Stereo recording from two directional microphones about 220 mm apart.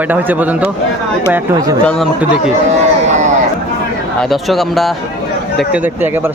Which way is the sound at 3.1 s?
35° right (ahead or behind).